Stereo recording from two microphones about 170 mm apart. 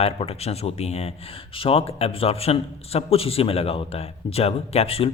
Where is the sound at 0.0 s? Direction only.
35° left (ahead or behind).